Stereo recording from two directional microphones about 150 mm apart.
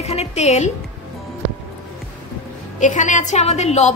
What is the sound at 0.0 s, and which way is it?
Speech, 45° left (ahead or behind).